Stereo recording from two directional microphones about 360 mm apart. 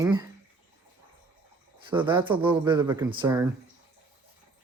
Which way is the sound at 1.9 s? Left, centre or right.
Centre.